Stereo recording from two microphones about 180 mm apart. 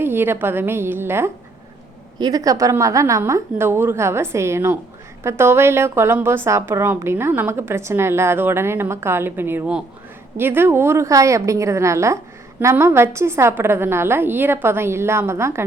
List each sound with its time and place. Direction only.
0.0 s a woman's voice: 10° right (ahead or behind)